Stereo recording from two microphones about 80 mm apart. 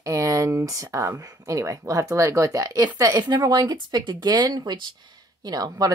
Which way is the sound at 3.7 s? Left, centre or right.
Right.